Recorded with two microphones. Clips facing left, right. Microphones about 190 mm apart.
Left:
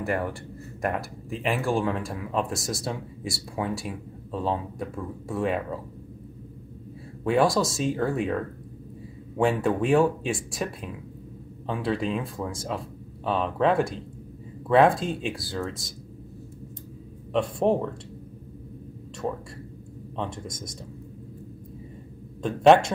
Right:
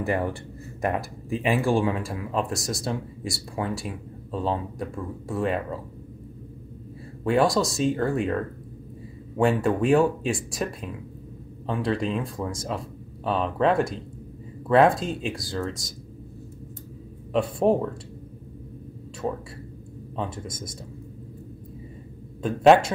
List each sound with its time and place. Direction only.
0.0 s speech: 20° right (ahead or behind); by 5.8 s centre (ahead or behind)
7.2 s speech: centre (ahead or behind)
17.3 s speech: 5° right (ahead or behind)
20.2 s speech: 5° right (ahead or behind)
22.4 s speech: 5° right (ahead or behind)